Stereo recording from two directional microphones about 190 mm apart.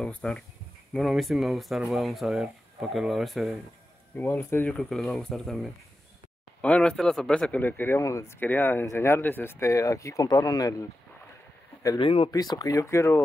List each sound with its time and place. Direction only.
0.0 s speech: centre (ahead or behind)
4.2 s speech: 10° left (ahead or behind)
4.7 s speech: centre (ahead or behind)